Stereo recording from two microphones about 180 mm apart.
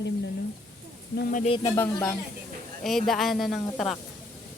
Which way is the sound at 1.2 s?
55° left (ahead or behind).